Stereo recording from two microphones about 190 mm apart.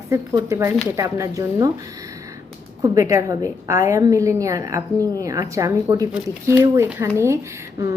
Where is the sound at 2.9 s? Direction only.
15° right (ahead or behind).